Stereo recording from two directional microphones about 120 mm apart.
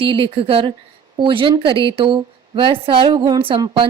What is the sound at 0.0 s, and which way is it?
Speech, 50° right (ahead or behind).